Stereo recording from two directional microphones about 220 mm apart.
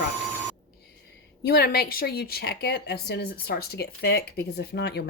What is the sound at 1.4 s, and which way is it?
A woman's voice, 45° left (ahead or behind).